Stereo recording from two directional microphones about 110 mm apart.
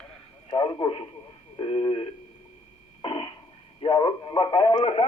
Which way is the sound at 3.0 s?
50° left (ahead or behind).